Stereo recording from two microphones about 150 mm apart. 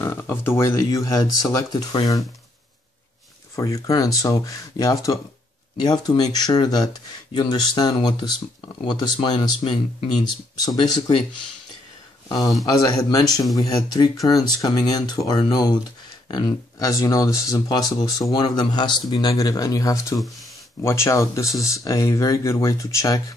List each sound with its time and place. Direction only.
0.0 s speech: 15° left (ahead or behind)
3.5 s speech: 20° left (ahead or behind)
10.8 s speech: 40° left (ahead or behind)
12.6 s speech: 25° left (ahead or behind)